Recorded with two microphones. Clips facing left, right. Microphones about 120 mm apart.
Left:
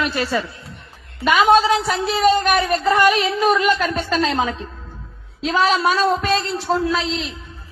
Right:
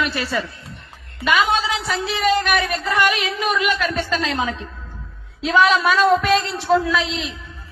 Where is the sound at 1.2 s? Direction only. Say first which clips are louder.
Left 5 dB; 40° left (ahead or behind).